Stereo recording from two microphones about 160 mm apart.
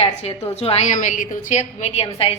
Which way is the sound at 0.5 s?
40° left (ahead or behind).